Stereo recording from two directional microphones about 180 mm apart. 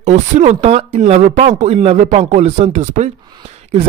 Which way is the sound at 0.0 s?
40° right (ahead or behind).